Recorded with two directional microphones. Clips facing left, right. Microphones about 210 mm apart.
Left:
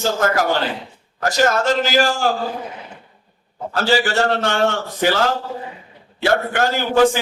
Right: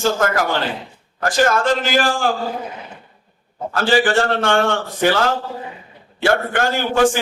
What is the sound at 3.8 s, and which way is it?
A man's voice, 50° right (ahead or behind).